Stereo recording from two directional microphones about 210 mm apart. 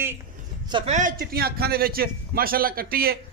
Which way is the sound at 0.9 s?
40° right (ahead or behind).